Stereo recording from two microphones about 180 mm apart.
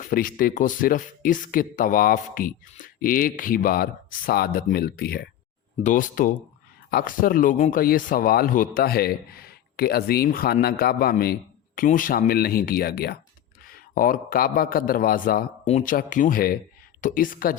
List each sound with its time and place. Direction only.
0.0 s speech: 50° left (ahead or behind)
5.8 s speech: 45° left (ahead or behind)
15.6 s speech: 40° left (ahead or behind)